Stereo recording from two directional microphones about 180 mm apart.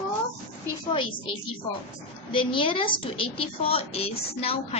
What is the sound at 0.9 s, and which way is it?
A woman's voice, 30° left (ahead or behind).